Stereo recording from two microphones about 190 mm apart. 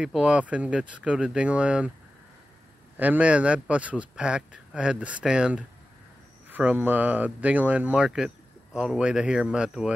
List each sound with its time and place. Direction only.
0.0 s speech: 5° right (ahead or behind)
3.0 s speech: 5° right (ahead or behind)